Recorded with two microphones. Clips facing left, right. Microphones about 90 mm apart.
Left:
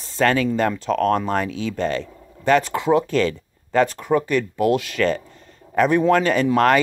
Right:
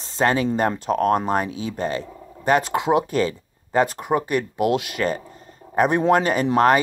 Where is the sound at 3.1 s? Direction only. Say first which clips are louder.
Left 2 dB; 30° right (ahead or behind).